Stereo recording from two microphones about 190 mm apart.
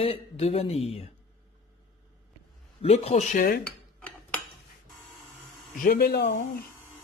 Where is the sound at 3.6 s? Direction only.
10° left (ahead or behind).